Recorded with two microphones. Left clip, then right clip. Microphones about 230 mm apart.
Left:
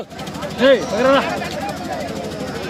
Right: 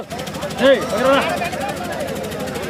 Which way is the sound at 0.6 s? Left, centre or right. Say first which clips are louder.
Left 1 dB; left.